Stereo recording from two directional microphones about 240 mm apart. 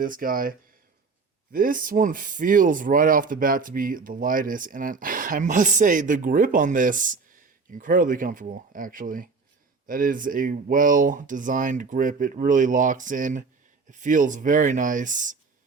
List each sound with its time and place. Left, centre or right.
0.0 s speech: right
1.5 s speech: right